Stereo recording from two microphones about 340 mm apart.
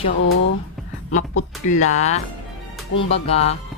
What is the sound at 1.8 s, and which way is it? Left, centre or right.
Speech, centre.